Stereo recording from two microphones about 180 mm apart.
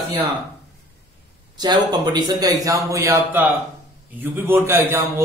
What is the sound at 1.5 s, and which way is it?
A man's voice, 25° right (ahead or behind).